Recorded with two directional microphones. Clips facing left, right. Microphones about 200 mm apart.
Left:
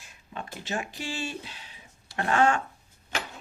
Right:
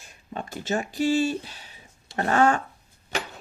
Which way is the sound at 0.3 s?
40° right (ahead or behind).